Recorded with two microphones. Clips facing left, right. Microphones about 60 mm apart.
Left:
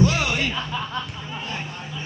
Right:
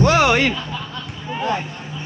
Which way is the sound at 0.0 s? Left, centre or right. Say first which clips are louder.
Right 7 dB; right.